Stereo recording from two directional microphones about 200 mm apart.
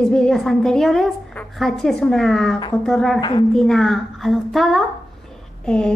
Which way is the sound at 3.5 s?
Centre (ahead or behind).